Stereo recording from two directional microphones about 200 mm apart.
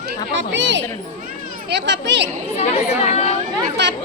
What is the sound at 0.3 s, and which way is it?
Speech, 65° right (ahead or behind).